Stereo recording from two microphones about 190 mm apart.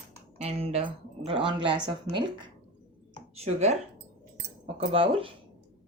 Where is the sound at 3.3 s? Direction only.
35° right (ahead or behind).